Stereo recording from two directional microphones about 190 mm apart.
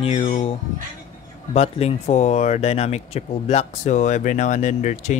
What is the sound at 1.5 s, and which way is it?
Speech, 35° left (ahead or behind).